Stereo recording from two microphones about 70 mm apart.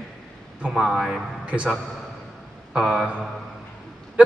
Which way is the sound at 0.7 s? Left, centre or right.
Centre.